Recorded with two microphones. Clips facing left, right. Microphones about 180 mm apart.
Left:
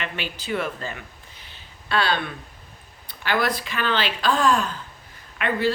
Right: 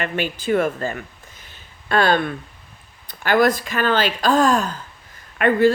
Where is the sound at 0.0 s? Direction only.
50° right (ahead or behind).